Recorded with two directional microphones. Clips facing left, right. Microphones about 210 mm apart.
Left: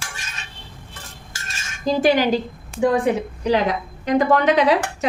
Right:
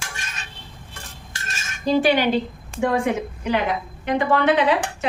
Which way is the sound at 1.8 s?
40° left (ahead or behind).